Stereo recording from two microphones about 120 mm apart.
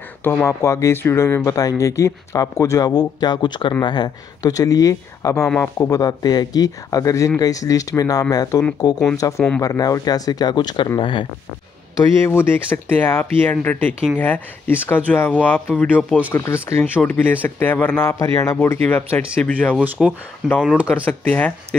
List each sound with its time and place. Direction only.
0.2 s speech: 15° left (ahead or behind); by 11.2 s 45° left (ahead or behind)
12.3 s speech: 20° left (ahead or behind)